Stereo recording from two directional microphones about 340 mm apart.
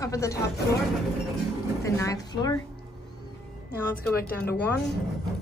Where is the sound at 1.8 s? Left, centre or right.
Centre.